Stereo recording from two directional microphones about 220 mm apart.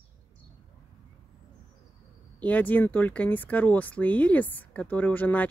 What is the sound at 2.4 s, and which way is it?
Speech, 5° left (ahead or behind).